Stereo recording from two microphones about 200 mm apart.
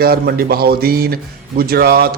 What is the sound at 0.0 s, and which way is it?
A man's voice, 50° right (ahead or behind).